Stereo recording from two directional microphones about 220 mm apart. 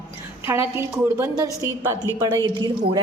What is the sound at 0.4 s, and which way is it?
A woman's voice, 10° right (ahead or behind).